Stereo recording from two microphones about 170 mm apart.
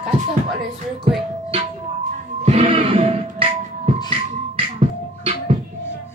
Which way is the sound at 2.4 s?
35° right (ahead or behind).